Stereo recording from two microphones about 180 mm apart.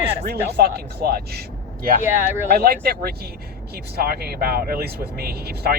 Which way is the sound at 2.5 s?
55° right (ahead or behind).